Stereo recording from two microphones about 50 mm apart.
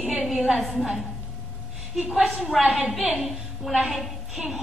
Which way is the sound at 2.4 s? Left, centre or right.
Centre.